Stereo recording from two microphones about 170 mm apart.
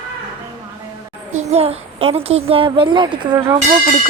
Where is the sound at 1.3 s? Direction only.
40° right (ahead or behind).